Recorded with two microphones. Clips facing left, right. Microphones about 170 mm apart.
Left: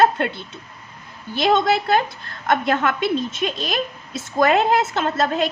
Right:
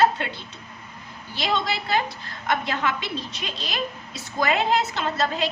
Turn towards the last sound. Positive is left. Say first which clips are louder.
# left 5 dB
turn(degrees=50)  # may be behind; listen again after turning